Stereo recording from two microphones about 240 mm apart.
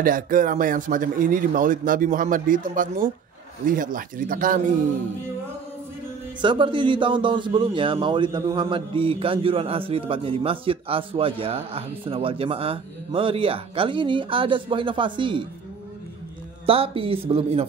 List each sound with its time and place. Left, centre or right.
0.0 s speech: right
6.4 s a man's voice: centre
16.6 s a man's voice: right